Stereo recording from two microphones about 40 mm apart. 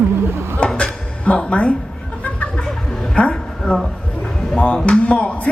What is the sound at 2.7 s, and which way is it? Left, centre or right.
Chuckle, centre.